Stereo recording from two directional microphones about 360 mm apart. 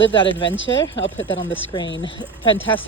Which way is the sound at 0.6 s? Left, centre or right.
Left.